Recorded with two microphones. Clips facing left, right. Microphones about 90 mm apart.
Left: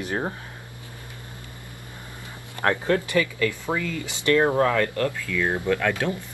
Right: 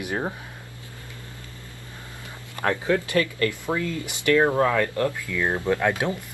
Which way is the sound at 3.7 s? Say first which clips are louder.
Right 1 dB; 15° left (ahead or behind).